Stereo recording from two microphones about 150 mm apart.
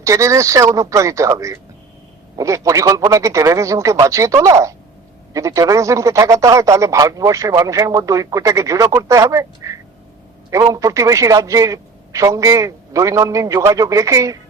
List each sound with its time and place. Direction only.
0.0 s a man's voice: 20° right (ahead or behind)